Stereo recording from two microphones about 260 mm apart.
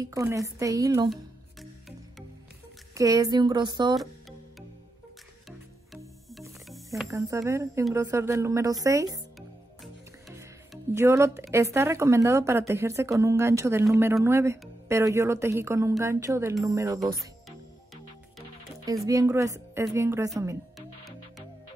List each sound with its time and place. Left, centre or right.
0.1 s a woman's voice: centre
1.1 s music: centre
2.9 s a woman's voice: centre
7.0 s a woman's voice: centre
10.7 s a woman's voice: centre
19.0 s a woman's voice: centre